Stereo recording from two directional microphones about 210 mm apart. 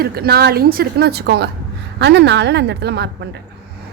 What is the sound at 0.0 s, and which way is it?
A woman's voice, 50° right (ahead or behind).